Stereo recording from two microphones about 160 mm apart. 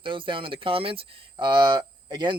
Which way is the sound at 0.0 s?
30° right (ahead or behind).